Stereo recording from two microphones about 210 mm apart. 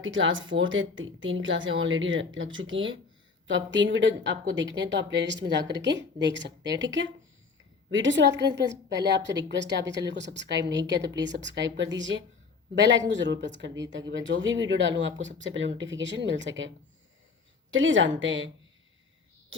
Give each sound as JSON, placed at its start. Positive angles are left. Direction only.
{"t": 0.0, "sound": "speech", "side_deg": -65}